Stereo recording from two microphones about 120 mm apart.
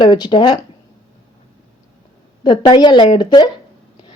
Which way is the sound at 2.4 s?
35° left (ahead or behind).